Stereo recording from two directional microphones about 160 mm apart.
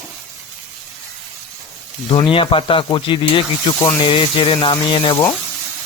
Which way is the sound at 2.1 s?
35° left (ahead or behind).